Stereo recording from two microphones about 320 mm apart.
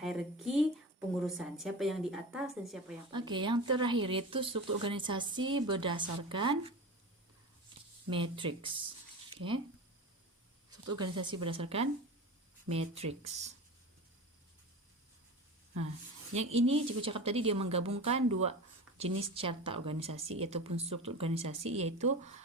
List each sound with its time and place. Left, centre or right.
0.0 s a woman's voice: centre
3.1 s speech: centre
8.1 s speech: centre
10.9 s speech: centre
16.3 s speech: centre
19.3 s speech: centre